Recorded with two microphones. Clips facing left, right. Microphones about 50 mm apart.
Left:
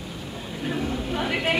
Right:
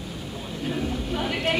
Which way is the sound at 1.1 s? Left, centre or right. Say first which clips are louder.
Left 1 dB; centre.